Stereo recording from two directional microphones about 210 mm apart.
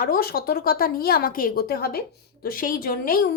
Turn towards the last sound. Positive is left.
turn(degrees=45)  # may be behind; listen again after turning